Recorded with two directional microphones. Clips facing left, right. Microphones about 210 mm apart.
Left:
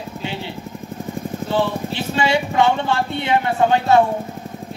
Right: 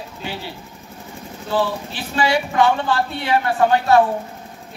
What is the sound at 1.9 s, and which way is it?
Speech, 25° left (ahead or behind).